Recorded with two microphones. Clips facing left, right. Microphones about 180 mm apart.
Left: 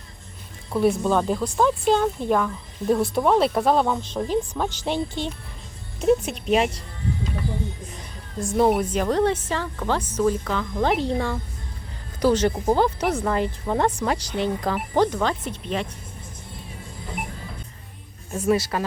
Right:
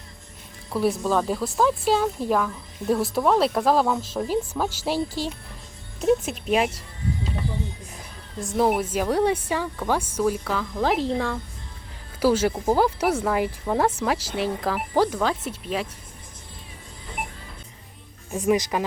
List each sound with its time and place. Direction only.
0.7 s speech: centre (ahead or behind)
7.9 s speech: centre (ahead or behind)
18.3 s speech: 15° right (ahead or behind)